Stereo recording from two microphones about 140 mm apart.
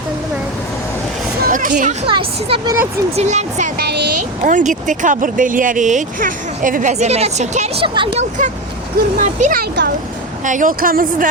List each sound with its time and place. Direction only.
1.5 s a sound: 70° right (ahead or behind)
2.0 s speech: 35° right (ahead or behind)
3.2 s speech: 55° right (ahead or behind)
4.4 s speech: 65° right (ahead or behind); by 8.1 s 40° right (ahead or behind)
9.1 s speech: 75° right (ahead or behind)
10.4 s speech: 70° right (ahead or behind); by 11.3 s 85° right